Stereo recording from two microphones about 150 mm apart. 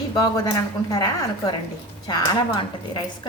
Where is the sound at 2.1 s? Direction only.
30° left (ahead or behind).